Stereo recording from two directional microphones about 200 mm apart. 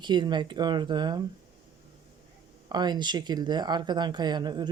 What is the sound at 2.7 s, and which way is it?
Speech, 20° right (ahead or behind).